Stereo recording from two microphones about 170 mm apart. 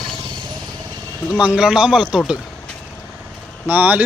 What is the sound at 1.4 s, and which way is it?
A man's voice, 5° right (ahead or behind).